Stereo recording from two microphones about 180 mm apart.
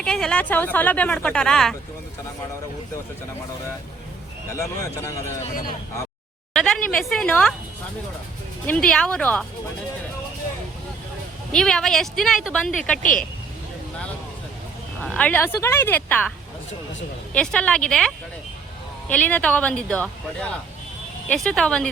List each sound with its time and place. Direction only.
0.0 s speech: 5° left (ahead or behind)
4.5 s speech: 15° left (ahead or behind)
5.2 s speech: 35° left (ahead or behind)
6.5 s speech: centre (ahead or behind)
8.6 s speech: 5° left (ahead or behind)
11.5 s speech: 5° left (ahead or behind)
13.0 s speech: 50° left (ahead or behind)
15.0 s speech: 5° left (ahead or behind)
17.3 s speech: 5° left (ahead or behind)